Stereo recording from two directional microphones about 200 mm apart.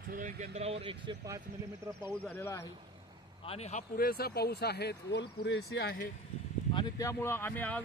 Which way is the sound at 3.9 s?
50° left (ahead or behind).